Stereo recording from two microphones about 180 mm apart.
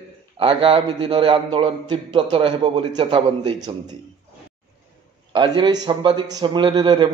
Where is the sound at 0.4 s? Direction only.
30° right (ahead or behind).